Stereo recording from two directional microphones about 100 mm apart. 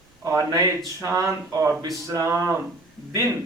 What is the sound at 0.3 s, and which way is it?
Speech, 30° right (ahead or behind).